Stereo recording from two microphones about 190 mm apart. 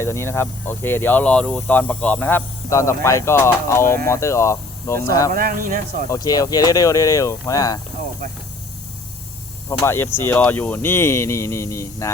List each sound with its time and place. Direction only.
0.0 s speech: 15° left (ahead or behind)
5.3 s speech: 45° right (ahead or behind)
6.1 s speech: 20° left (ahead or behind)
9.6 s speech: 15° left (ahead or behind)